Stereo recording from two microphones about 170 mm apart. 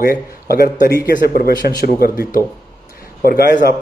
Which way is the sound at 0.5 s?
65° left (ahead or behind).